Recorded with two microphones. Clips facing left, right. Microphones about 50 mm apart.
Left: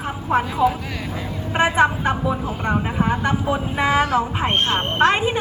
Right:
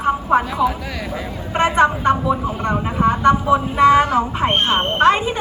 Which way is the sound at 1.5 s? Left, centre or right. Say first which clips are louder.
Right 2 dB; centre.